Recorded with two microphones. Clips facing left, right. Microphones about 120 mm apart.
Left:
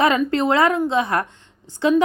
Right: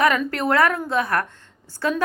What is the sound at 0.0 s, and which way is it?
Speech, 25° left (ahead or behind).